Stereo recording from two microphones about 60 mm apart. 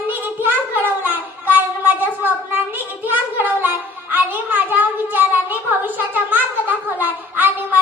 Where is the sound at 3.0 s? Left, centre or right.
Right.